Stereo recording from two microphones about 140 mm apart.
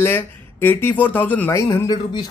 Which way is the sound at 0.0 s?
15° left (ahead or behind).